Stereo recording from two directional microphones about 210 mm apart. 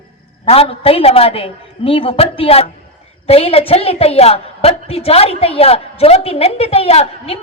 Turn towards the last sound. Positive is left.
turn(degrees=30)  # may be behind; listen again after turning